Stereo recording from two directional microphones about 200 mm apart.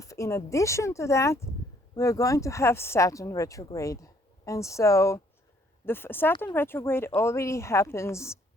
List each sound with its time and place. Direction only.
0.0 s speech: 15° left (ahead or behind)